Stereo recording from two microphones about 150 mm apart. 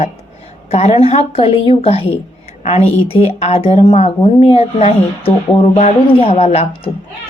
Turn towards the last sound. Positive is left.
turn(degrees=40)  # may be behind; listen again after turning